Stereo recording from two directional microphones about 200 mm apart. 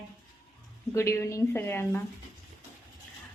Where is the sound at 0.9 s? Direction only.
15° left (ahead or behind).